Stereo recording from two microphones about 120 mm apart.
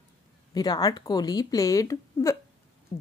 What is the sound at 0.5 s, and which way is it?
A woman's voice, 35° left (ahead or behind).